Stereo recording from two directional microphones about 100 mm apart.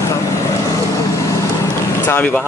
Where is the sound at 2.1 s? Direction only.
15° left (ahead or behind).